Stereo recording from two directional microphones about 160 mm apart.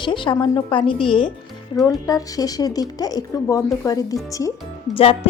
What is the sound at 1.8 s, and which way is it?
Speech, 20° left (ahead or behind).